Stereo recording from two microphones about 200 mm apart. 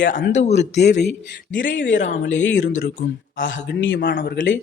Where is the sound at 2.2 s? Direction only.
70° left (ahead or behind).